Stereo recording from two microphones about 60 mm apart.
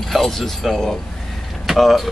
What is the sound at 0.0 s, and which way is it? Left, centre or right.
Speech, centre.